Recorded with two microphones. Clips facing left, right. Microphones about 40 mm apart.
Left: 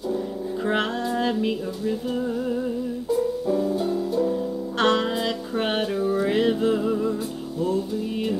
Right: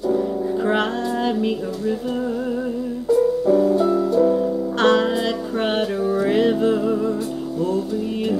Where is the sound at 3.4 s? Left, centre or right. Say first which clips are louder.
Right 7 dB; right.